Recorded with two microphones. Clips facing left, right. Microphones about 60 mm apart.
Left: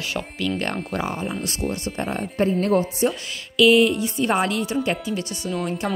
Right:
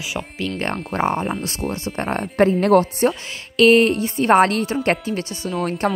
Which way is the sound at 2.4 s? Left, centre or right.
Right.